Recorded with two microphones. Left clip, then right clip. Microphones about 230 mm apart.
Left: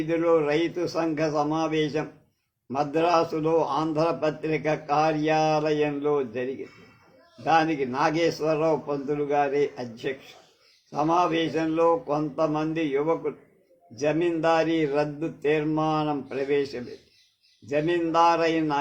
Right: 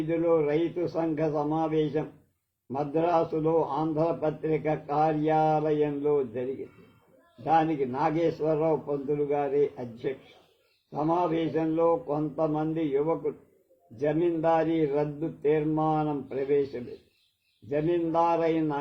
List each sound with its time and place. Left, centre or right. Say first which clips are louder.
0.1 s a man's voice: left 3 dB; left
7.4 s a man's voice: left 2 dB; left